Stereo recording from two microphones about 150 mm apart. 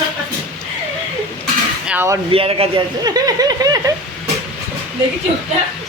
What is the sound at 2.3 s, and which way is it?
Speech, 40° right (ahead or behind).